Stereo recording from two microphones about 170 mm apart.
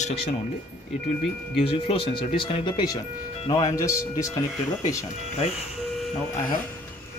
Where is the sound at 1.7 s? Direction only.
30° left (ahead or behind).